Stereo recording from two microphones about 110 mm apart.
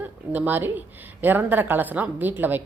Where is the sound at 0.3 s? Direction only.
15° right (ahead or behind).